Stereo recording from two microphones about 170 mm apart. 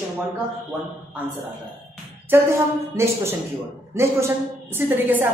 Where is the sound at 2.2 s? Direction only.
15° right (ahead or behind).